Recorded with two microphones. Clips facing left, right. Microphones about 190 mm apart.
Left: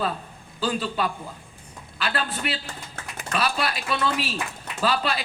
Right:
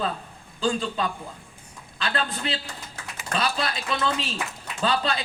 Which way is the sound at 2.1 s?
25° right (ahead or behind).